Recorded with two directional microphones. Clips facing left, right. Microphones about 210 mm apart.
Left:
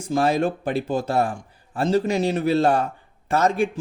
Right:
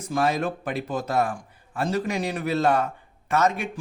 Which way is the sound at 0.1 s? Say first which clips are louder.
Left 4 dB; 30° left (ahead or behind).